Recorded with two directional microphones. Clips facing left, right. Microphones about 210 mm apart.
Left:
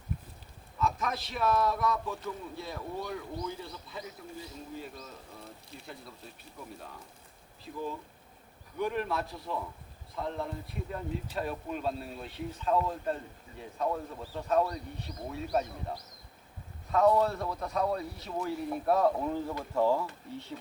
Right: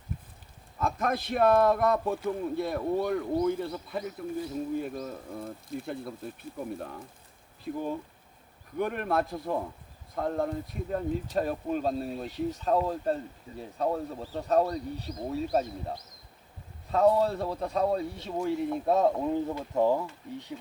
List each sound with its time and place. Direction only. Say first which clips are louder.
0.8 s speech: right 3 dB; 50° right (ahead or behind); by 15.6 s 35° right (ahead or behind)
16.9 s a man's voice: right 2 dB; 30° right (ahead or behind); by 20.6 s 15° right (ahead or behind)